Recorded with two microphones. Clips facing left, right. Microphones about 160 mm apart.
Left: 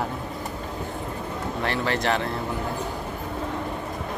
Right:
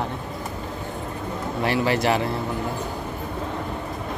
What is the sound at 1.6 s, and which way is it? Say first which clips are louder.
Speech: right 4 dB; 10° right (ahead or behind).